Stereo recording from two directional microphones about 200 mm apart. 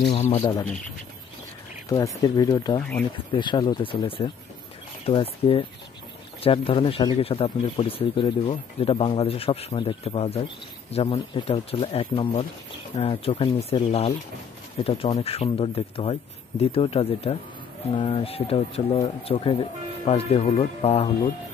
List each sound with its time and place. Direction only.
0.1 s speech: 35° left (ahead or behind)
1.9 s speech: 15° left (ahead or behind)